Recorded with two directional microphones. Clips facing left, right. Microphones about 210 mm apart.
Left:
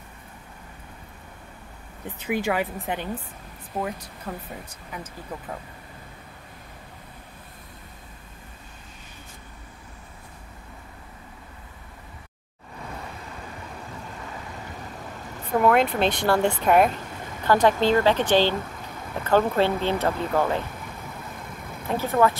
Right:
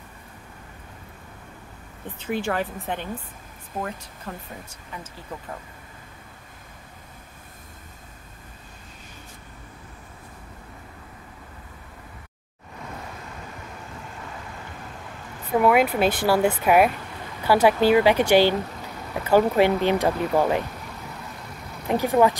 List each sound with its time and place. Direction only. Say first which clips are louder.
2.2 s speech: left 1 dB; 10° left (ahead or behind)
4.3 s speech: left 2 dB; 5° left (ahead or behind)
15.5 s speech: right 1 dB; 5° right (ahead or behind)
21.5 s vehicle: left 1 dB; 50° left (ahead or behind)
21.8 s speech: right 2 dB; 15° right (ahead or behind)